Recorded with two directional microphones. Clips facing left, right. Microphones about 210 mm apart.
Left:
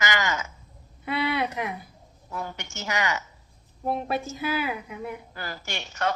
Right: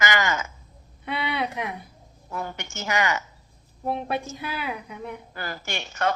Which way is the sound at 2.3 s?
55° right (ahead or behind).